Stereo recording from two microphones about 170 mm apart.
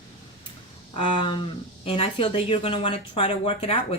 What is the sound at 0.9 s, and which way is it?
Speech, 30° left (ahead or behind).